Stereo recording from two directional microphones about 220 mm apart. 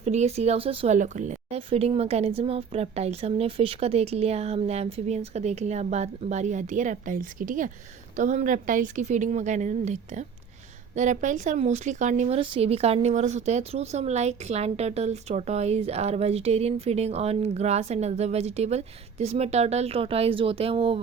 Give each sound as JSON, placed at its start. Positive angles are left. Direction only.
{"t": 0.0, "sound": "a woman's voice", "side_deg": -30}